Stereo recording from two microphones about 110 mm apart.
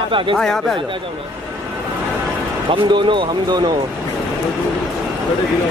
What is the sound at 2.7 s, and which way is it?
Speech, 50° right (ahead or behind).